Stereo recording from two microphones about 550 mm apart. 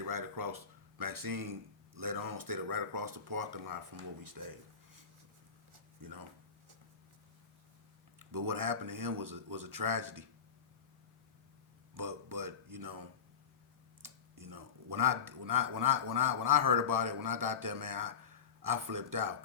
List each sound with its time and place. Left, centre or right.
0.0 s speech: right
6.0 s speech: right
8.3 s speech: right
11.9 s speech: right